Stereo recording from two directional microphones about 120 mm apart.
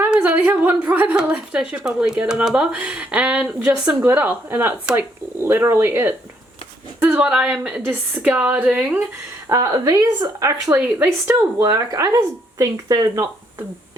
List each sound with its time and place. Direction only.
0.0 s a woman's voice: 10° right (ahead or behind)
9.5 s speech: 30° right (ahead or behind)
10.8 s speech: 20° right (ahead or behind)